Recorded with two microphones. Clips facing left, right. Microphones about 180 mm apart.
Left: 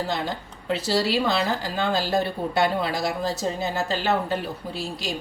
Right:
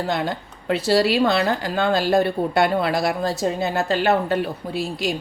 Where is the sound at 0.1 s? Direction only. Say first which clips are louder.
Right 4 dB; 60° right (ahead or behind).